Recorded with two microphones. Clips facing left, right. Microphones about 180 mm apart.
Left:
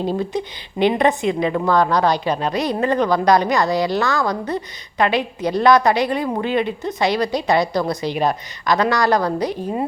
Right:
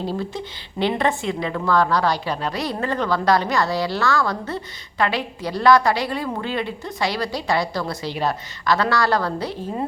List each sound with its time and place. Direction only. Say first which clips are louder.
0.0 s a woman's voice: left 5 dB; 20° left (ahead or behind)